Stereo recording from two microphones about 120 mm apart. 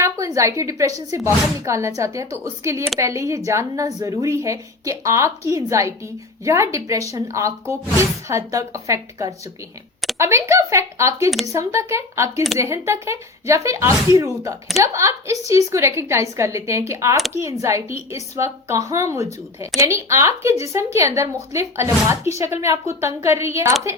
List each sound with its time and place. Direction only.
0.0 s a woman's voice: 25° right (ahead or behind)